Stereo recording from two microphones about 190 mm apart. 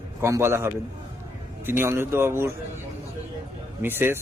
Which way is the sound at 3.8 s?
10° right (ahead or behind).